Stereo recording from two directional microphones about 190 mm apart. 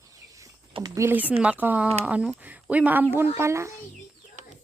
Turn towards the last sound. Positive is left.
turn(degrees=-15)  # may be behind; listen again after turning